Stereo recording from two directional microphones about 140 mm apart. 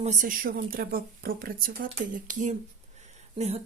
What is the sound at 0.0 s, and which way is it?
Speech, 60° right (ahead or behind).